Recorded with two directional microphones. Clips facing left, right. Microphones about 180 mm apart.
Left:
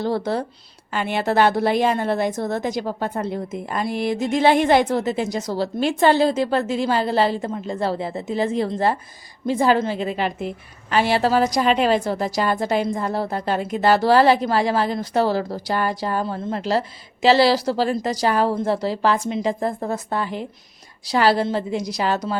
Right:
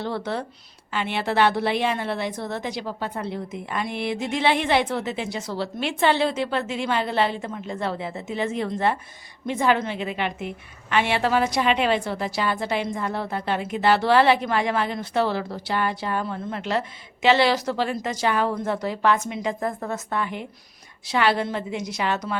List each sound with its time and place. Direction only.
0.0 s a woman's voice: 40° left (ahead or behind)